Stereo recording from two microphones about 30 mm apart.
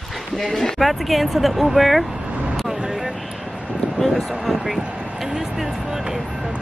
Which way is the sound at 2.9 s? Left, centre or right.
Centre.